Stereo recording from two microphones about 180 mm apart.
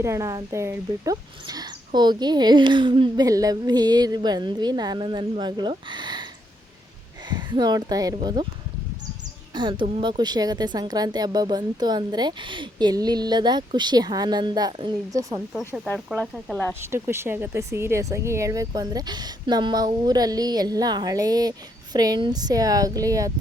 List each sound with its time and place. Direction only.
0.0 s speech: 15° right (ahead or behind)
7.3 s speech: 25° right (ahead or behind)
9.6 s speech: 25° right (ahead or behind)
15.5 s speech: centre (ahead or behind)
16.8 s speech: 15° right (ahead or behind)